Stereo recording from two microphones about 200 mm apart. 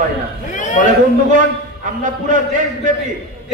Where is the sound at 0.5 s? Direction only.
40° left (ahead or behind).